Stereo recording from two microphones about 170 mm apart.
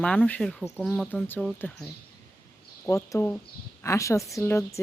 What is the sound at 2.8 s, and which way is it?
Speech, 15° left (ahead or behind).